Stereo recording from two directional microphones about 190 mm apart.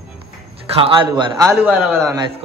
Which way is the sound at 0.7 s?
25° right (ahead or behind).